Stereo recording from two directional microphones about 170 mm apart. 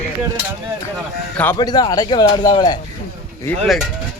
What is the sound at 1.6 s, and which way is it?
Speech, 25° left (ahead or behind).